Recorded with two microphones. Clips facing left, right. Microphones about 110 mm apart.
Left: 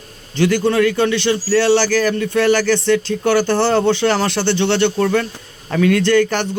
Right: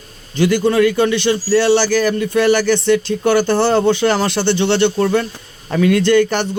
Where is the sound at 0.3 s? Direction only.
10° right (ahead or behind).